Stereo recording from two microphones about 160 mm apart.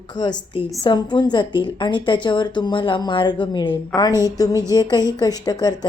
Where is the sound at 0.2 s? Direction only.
30° left (ahead or behind).